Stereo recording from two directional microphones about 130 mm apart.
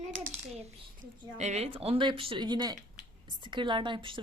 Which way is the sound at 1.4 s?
55° right (ahead or behind).